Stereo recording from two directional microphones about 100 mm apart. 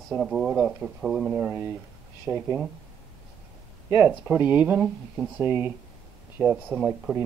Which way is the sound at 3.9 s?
25° right (ahead or behind).